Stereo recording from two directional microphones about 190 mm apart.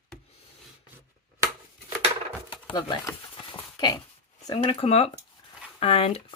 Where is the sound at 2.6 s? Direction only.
25° left (ahead or behind).